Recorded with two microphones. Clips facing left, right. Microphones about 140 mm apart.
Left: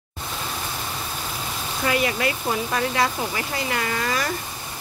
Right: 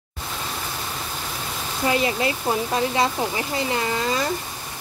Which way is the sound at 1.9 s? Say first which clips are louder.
Right 1 dB; 25° right (ahead or behind).